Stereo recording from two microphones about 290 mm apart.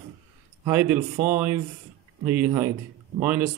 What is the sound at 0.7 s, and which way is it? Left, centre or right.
Speech, centre.